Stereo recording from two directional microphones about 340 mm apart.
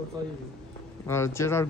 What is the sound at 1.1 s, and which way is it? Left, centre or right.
Speech, centre.